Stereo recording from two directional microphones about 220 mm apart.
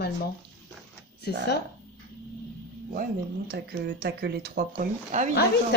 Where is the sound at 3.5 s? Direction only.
45° right (ahead or behind).